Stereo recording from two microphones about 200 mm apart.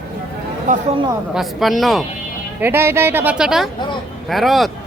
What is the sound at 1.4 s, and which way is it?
Speech, centre (ahead or behind).